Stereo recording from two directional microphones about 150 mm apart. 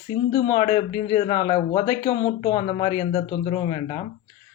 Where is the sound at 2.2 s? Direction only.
40° left (ahead or behind).